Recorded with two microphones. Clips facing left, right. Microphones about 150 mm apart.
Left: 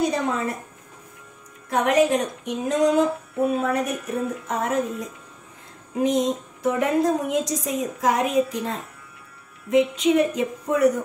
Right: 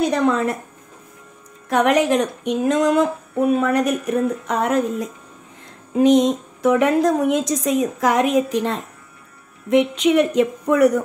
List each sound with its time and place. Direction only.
0.0 s speech: 75° right (ahead or behind)
1.7 s a woman's voice: 80° right